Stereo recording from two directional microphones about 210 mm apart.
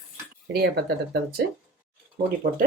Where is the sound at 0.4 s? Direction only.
55° right (ahead or behind).